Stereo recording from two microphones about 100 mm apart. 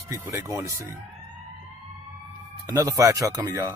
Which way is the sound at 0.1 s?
35° right (ahead or behind).